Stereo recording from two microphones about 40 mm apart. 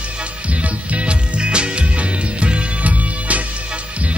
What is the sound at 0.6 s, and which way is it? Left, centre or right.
Music, right.